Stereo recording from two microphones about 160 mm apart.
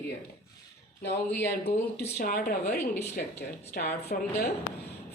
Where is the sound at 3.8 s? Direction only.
75° left (ahead or behind).